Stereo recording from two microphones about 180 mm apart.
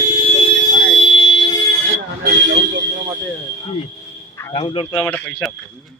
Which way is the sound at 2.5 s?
75° right (ahead or behind).